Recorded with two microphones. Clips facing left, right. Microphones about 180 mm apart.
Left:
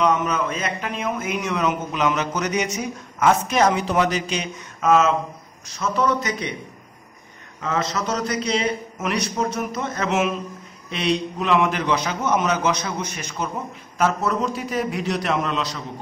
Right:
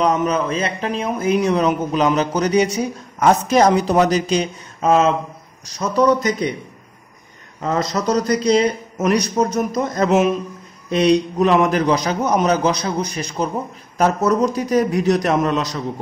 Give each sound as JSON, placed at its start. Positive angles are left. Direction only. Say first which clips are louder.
{"t": 0.0, "sound": "a man's voice", "louder": "right 3 dB", "side_deg": -35}
{"t": 7.6, "sound": "a man's voice", "louder": "right 5 dB", "side_deg": -35}